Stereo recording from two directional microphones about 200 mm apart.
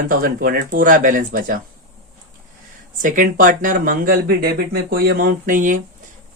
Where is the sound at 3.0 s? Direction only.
40° right (ahead or behind).